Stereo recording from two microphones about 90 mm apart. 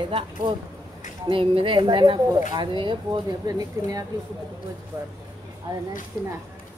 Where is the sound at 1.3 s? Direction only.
80° right; by 3.2 s 65° right (ahead or behind).